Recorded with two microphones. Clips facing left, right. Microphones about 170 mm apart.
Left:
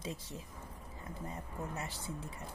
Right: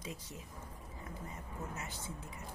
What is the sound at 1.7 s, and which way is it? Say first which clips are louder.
Speech: left 3 dB; 30° left (ahead or behind).